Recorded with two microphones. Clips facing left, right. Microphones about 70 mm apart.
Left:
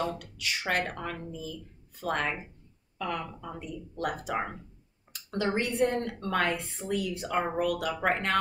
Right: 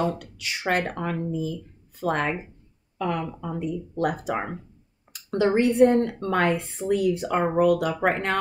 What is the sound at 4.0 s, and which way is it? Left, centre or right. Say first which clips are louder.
A woman's voice: right 5 dB; right.